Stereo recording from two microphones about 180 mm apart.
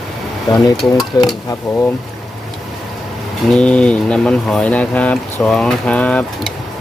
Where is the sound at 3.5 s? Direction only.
5° left (ahead or behind).